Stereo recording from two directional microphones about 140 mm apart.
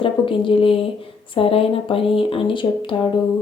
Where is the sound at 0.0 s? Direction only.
35° left (ahead or behind).